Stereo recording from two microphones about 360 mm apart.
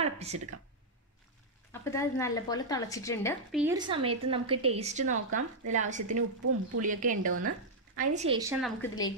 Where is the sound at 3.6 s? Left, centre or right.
Centre.